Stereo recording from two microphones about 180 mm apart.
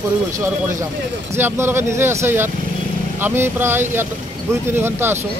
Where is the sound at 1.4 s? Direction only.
10° right (ahead or behind).